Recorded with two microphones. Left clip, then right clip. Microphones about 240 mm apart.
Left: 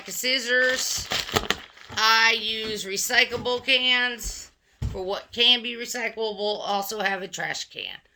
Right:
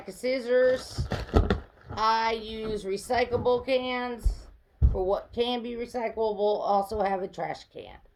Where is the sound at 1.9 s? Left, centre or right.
Centre.